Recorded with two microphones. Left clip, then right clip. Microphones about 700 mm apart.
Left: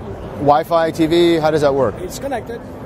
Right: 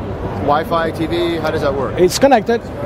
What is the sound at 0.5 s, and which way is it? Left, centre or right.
Speech, left.